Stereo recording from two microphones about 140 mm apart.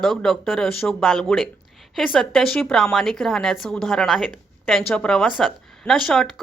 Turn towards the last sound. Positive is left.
turn(degrees=5)  # may be behind; listen again after turning